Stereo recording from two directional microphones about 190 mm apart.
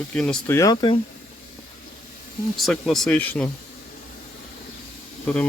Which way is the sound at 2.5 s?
Centre (ahead or behind).